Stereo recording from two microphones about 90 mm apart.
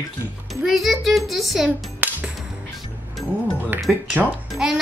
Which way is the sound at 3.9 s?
Centre (ahead or behind).